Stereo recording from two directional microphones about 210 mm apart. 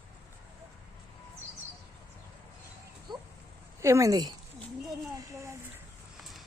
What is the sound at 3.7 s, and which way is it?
Speech, 15° right (ahead or behind).